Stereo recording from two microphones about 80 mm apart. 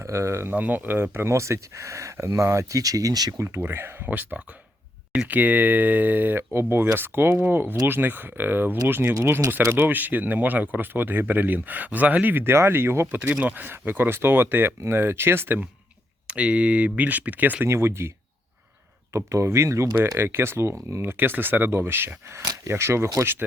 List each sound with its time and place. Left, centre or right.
0.0 s speech: right
0.5 s speech: right
3.4 s speech: right
13.1 s speech: centre
16.2 s speech: centre
17.7 s speech: right
19.1 s speech: right